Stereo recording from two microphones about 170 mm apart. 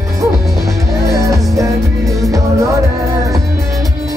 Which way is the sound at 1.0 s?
20° right (ahead or behind).